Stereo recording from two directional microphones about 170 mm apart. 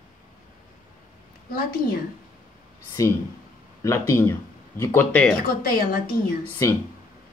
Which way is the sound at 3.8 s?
15° left (ahead or behind).